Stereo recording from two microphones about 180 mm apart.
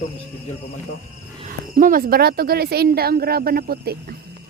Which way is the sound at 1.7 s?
50° right (ahead or behind).